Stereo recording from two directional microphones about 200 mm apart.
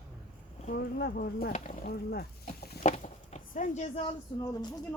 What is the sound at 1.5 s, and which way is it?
Speech, 30° left (ahead or behind).